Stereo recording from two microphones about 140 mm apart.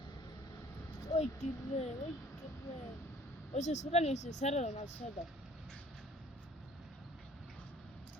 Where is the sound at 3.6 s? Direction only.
55° left (ahead or behind).